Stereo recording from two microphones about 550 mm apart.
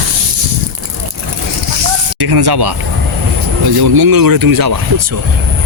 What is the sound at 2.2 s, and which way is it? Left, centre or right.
Speech, right.